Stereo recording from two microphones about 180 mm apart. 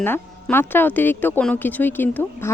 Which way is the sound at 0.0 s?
10° left (ahead or behind).